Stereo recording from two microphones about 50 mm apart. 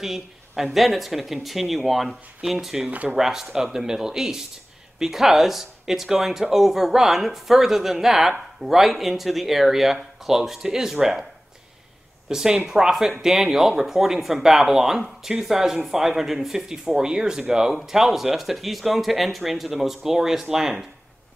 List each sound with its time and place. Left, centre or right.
0.0 s speech: centre
2.9 s speech: right
3.2 s speech: centre
12.3 s speech: centre